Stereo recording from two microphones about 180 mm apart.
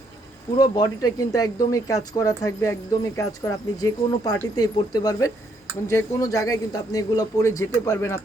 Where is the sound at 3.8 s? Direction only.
20° left (ahead or behind).